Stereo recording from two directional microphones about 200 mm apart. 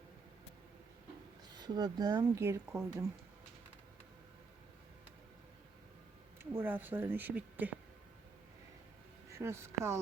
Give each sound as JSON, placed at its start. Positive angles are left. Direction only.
{"t": 1.5, "sound": "speech", "side_deg": -20}
{"t": 6.4, "sound": "speech", "side_deg": -10}
{"t": 9.3, "sound": "speech", "side_deg": -15}